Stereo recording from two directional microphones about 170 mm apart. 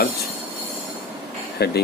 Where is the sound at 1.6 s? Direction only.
70° left (ahead or behind).